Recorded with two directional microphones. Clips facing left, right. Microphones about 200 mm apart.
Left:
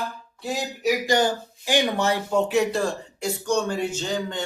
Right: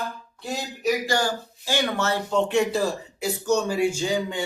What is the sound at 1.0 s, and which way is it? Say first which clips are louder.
Speech: left 3 dB; 20° left (ahead or behind).